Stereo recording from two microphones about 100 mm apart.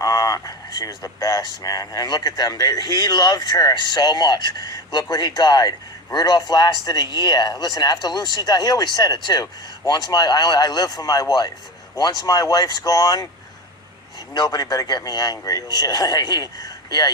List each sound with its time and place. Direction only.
0.0 s speech: 35° left (ahead or behind)
14.3 s speech: 40° left (ahead or behind)